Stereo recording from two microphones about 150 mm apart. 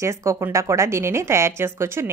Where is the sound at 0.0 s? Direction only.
20° right (ahead or behind).